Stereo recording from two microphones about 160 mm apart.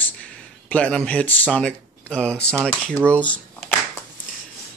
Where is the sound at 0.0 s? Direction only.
10° left (ahead or behind).